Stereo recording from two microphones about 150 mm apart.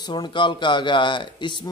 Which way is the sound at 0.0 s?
30° left (ahead or behind).